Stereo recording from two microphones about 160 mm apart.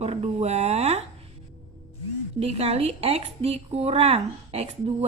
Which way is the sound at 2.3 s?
40° right (ahead or behind).